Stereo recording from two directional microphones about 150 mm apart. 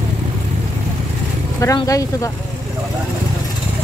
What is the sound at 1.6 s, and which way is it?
Speech, 25° left (ahead or behind).